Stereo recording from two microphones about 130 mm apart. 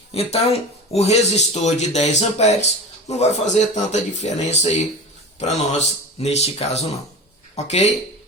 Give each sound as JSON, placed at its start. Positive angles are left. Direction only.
{"t": 0.1, "sound": "speech", "side_deg": 50}